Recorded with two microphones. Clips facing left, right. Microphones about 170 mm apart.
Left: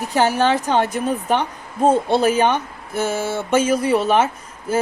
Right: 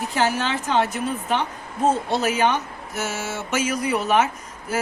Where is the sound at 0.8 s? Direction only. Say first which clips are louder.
Left 5 dB; 35° left (ahead or behind).